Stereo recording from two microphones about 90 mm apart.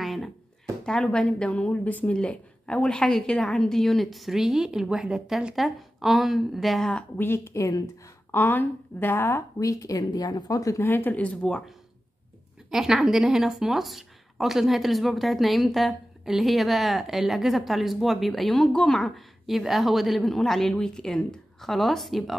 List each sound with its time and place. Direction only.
0.0 s a sound: centre (ahead or behind)
0.8 s a woman's voice: 10° left (ahead or behind)
6.9 s a woman's voice: 15° left (ahead or behind)
7.2 s speech: 30° left (ahead or behind)
8.3 s a woman's voice: 20° left (ahead or behind)
9.6 s speech: 35° left (ahead or behind)
10.9 s a woman's voice: 20° left (ahead or behind)
12.7 s speech: 5° right (ahead or behind)